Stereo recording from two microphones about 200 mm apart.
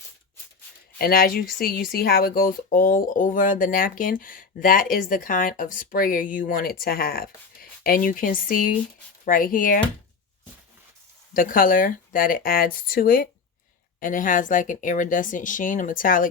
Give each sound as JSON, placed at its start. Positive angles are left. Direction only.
{"t": 0.9, "sound": "speech", "side_deg": 50}
{"t": 11.3, "sound": "speech", "side_deg": 45}